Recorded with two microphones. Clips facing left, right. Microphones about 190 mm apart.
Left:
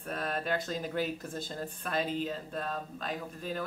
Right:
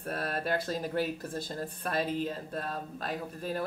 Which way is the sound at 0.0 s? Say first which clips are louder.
Right 1 dB; 40° right (ahead or behind).